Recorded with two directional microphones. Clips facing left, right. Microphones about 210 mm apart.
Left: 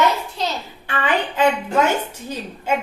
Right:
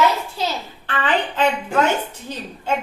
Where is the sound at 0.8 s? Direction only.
10° left (ahead or behind).